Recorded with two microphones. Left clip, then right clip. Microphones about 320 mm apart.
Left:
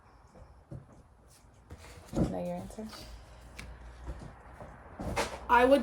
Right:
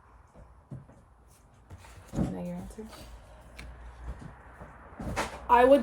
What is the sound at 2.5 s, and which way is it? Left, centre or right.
Speech, centre.